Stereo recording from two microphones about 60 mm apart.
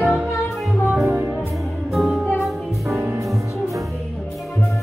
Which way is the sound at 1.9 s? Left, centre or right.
Centre.